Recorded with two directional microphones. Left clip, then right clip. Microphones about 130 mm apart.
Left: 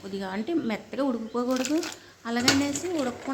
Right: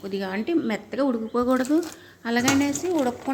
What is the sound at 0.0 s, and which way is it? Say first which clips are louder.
Speech: right 4 dB; 15° right (ahead or behind).